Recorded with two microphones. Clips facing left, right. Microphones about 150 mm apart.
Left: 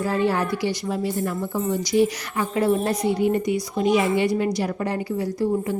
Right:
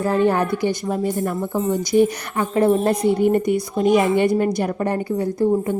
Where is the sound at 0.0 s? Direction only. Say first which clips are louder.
Right 4 dB; 50° right (ahead or behind).